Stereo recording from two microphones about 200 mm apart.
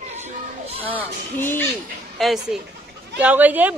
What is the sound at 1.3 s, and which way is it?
Speech, 10° left (ahead or behind).